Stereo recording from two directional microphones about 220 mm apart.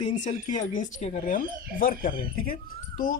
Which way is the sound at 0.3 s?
35° left (ahead or behind).